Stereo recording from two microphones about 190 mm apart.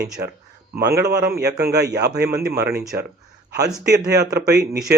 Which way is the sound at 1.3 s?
60° right (ahead or behind).